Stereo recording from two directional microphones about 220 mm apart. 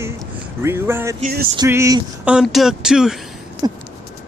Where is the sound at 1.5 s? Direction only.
15° right (ahead or behind).